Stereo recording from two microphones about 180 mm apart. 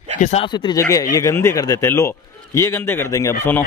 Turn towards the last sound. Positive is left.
turn(degrees=15)  # may be behind; listen again after turning